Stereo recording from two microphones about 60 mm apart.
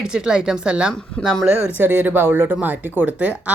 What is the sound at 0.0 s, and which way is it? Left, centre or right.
Speech, centre.